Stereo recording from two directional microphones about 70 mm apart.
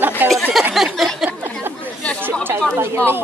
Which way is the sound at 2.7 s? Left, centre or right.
Right.